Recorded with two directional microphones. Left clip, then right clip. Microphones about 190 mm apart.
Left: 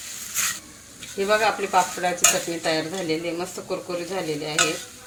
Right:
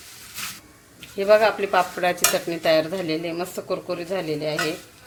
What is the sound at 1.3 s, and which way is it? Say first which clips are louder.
Speech: right 4 dB; 35° right (ahead or behind).